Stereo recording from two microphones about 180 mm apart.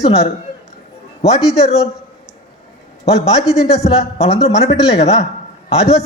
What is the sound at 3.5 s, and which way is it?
A man's voice, 35° left (ahead or behind).